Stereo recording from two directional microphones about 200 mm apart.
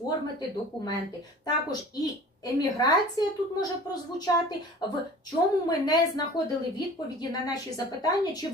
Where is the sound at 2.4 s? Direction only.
20° left (ahead or behind).